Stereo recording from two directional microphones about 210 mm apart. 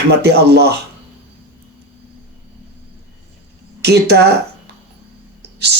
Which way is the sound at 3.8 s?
50° right (ahead or behind).